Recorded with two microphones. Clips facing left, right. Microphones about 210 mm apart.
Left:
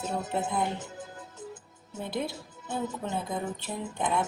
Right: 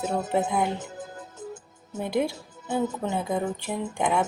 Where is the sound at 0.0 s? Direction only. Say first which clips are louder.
Right 6 dB; 65° right (ahead or behind).